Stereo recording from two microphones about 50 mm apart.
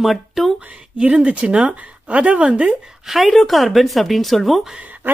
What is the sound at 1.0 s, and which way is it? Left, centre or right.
Speech, right.